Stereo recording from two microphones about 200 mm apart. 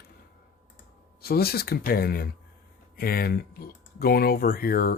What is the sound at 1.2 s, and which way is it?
Speech, 50° left (ahead or behind).